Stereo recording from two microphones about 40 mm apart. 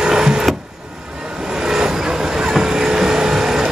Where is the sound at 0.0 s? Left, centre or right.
Centre.